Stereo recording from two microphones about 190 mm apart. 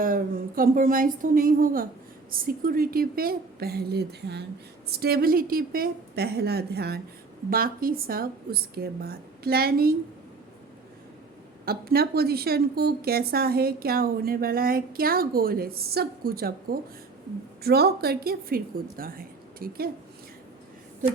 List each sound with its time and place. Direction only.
0.0 s a woman's voice: 45° right (ahead or behind)
11.6 s a woman's voice: 55° right (ahead or behind)